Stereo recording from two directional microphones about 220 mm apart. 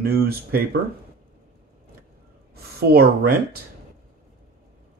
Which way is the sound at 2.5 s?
45° right (ahead or behind).